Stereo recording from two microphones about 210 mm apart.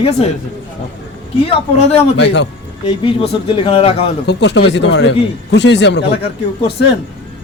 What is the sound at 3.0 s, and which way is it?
Speech, 25° left (ahead or behind).